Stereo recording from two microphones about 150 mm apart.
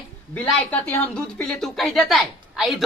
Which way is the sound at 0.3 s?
10° left (ahead or behind).